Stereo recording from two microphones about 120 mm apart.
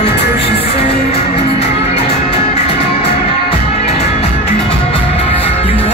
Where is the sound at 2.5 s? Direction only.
60° left (ahead or behind).